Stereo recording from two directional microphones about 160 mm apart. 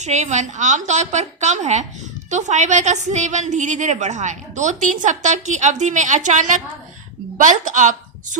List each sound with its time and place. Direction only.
0.0 s a woman's voice: 45° right (ahead or behind)